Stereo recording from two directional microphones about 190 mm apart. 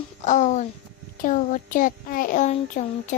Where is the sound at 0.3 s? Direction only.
40° left (ahead or behind).